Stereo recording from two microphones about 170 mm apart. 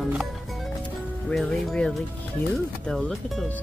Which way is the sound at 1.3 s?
5° left (ahead or behind).